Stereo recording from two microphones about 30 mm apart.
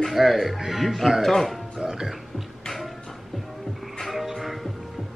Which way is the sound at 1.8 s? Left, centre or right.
Right.